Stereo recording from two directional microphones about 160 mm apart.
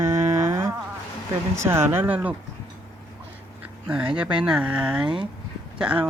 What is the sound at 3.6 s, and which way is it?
Speech, 10° right (ahead or behind).